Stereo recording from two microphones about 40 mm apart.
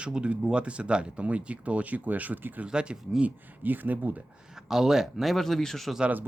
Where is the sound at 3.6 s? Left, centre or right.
Right.